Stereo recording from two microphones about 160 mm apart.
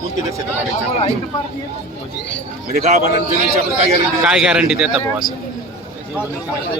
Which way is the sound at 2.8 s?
45° right (ahead or behind).